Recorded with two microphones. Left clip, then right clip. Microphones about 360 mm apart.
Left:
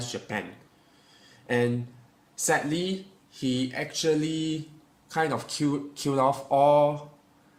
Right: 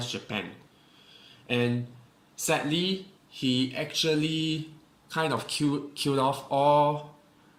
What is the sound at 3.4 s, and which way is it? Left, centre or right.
Speech, left.